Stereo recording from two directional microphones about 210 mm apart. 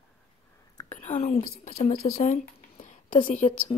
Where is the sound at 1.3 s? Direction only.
35° left (ahead or behind).